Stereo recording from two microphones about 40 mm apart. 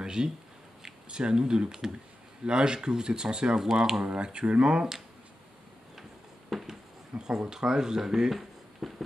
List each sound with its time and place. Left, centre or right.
0.0 s speech: centre
6.5 s a sound: centre
7.2 s speech: centre